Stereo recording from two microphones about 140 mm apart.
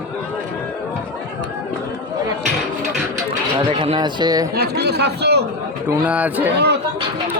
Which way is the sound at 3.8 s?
35° right (ahead or behind).